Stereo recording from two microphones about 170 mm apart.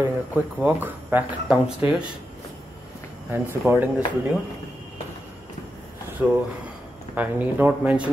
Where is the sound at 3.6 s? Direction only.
10° right (ahead or behind).